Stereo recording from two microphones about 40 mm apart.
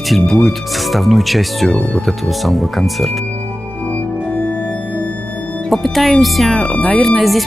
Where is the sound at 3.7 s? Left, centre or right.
Left.